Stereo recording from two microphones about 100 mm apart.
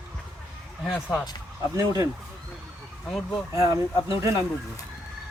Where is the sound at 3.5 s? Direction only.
35° right (ahead or behind).